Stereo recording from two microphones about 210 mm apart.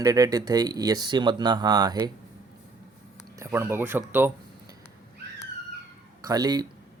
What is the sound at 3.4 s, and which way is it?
Speech, 10° right (ahead or behind).